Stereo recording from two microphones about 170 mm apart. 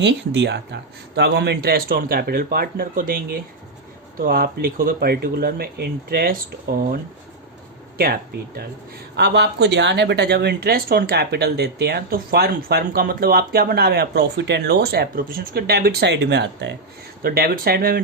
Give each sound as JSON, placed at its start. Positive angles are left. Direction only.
{"t": 0.0, "sound": "speech", "side_deg": -90}
{"t": 9.1, "sound": "speech", "side_deg": -80}
{"t": 17.2, "sound": "speech", "side_deg": -60}